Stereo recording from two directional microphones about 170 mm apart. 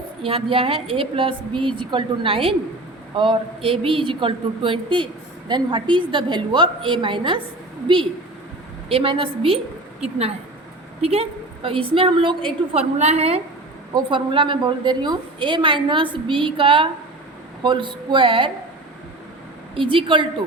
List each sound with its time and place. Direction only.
0.2 s a woman's voice: 35° right (ahead or behind)
8.9 s a woman's voice: 35° right (ahead or behind)
19.7 s a woman's voice: 30° right (ahead or behind)